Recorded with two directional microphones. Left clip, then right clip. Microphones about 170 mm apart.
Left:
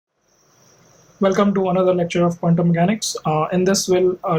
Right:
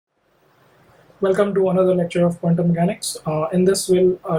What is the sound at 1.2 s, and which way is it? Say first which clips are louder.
Speech: even; 40° left (ahead or behind).